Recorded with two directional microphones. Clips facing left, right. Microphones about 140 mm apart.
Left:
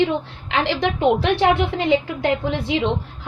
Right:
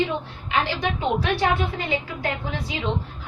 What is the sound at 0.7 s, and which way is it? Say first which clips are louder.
A woman's voice: left 6 dB; 75° left (ahead or behind).